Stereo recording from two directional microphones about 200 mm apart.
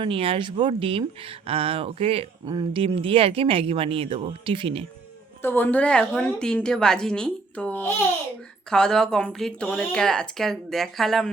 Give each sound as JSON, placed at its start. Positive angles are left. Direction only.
{"t": 0.0, "sound": "speech", "side_deg": -25}
{"t": 5.4, "sound": "speech", "side_deg": 10}